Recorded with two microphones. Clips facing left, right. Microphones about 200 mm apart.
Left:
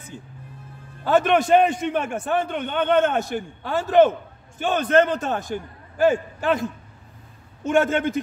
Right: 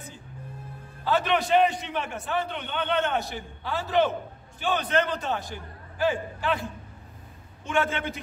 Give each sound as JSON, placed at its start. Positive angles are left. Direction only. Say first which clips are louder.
{"t": 1.0, "sound": "a man's voice", "louder": "left 6 dB", "side_deg": 50}